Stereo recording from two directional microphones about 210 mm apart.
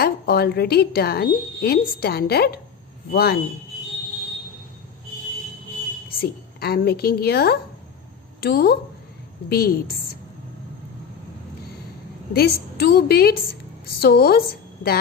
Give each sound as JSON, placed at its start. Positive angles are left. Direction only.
{"t": 0.0, "sound": "a woman's voice", "side_deg": 45}
{"t": 6.1, "sound": "a woman's voice", "side_deg": 50}
{"t": 12.3, "sound": "a woman's voice", "side_deg": 50}